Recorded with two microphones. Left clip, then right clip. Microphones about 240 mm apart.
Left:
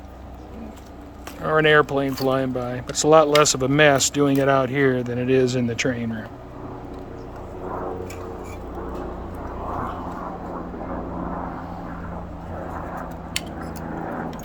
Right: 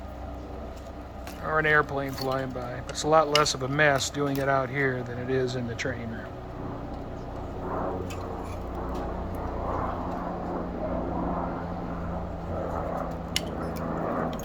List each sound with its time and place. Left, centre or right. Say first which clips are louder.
1.5 s speech: left 7 dB; left